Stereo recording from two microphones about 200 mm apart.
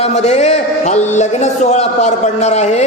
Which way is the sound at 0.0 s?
35° left (ahead or behind).